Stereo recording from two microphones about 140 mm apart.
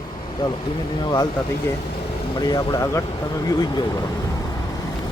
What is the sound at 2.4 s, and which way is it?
Speech, 25° left (ahead or behind).